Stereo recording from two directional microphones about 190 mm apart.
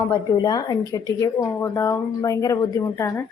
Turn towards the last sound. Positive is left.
turn(degrees=15)  # may be behind; listen again after turning